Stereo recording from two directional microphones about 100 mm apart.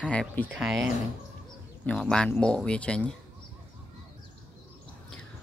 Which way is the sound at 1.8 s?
10° left (ahead or behind).